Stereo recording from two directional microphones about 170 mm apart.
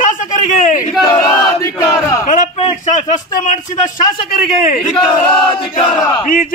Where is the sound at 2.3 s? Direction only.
45° left (ahead or behind).